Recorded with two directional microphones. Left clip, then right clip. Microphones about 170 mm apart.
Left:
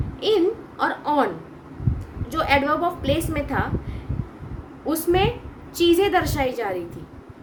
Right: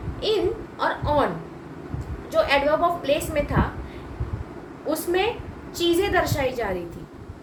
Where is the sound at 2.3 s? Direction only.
45° left (ahead or behind).